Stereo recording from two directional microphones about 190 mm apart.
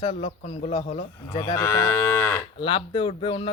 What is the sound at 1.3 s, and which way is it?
Moo, 20° left (ahead or behind).